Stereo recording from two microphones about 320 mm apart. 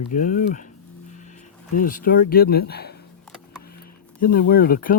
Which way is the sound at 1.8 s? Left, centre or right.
Left.